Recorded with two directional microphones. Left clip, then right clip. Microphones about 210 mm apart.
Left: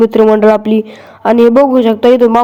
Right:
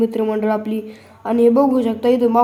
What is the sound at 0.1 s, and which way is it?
A man's voice, 35° left (ahead or behind).